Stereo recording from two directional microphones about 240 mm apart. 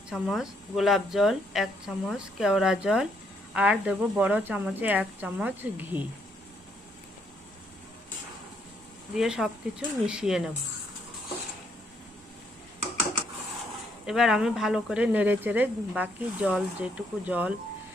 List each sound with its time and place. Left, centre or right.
0.1 s speech: centre
9.1 s speech: centre
14.1 s speech: centre